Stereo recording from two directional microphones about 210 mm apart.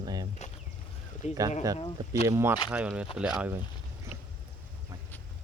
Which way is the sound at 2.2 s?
15° right (ahead or behind).